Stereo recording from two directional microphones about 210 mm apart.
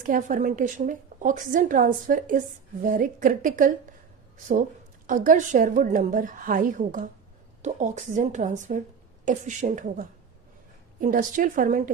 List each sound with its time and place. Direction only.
0.1 s a woman's voice: 40° right (ahead or behind)
5.0 s a woman's voice: 40° right (ahead or behind)